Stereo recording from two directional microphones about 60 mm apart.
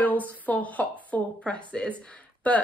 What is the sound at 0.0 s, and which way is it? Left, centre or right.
Speech, left.